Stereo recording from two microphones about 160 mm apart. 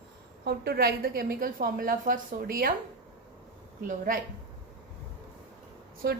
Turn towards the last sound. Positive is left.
turn(degrees=-90)